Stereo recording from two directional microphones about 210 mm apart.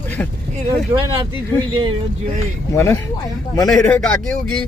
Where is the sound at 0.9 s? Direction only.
15° right (ahead or behind).